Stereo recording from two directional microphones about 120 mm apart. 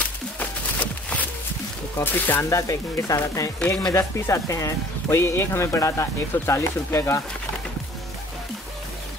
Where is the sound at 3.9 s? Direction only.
25° left (ahead or behind).